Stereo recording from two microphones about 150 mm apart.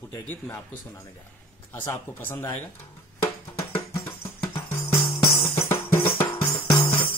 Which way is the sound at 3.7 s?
15° left (ahead or behind).